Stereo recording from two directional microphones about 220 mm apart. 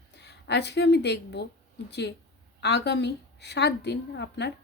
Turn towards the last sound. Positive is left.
turn(degrees=50)  # may be behind; listen again after turning